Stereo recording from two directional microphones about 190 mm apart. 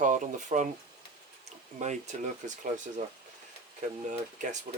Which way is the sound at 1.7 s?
40° right (ahead or behind).